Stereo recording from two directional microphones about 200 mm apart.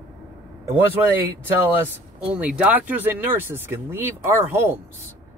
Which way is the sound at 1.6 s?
10° right (ahead or behind).